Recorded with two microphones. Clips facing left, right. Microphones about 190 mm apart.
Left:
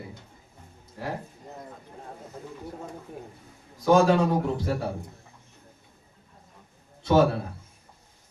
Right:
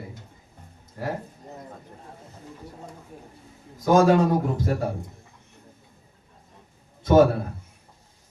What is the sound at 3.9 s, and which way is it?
Speech, 45° right (ahead or behind).